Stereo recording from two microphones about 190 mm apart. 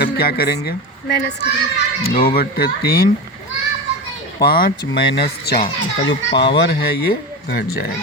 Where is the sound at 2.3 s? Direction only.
55° left (ahead or behind).